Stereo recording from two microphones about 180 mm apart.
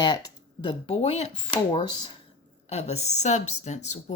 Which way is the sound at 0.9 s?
35° left (ahead or behind).